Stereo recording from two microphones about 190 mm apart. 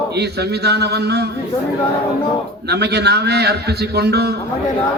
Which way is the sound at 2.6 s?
60° right (ahead or behind).